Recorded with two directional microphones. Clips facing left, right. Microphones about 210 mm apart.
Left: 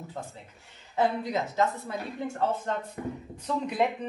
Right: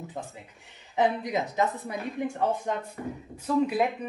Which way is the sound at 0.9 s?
15° right (ahead or behind).